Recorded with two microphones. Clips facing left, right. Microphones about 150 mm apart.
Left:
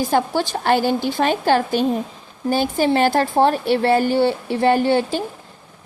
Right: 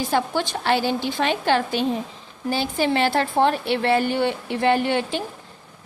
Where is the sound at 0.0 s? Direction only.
40° left (ahead or behind).